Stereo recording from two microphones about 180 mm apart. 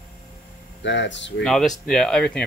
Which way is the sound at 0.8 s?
85° left.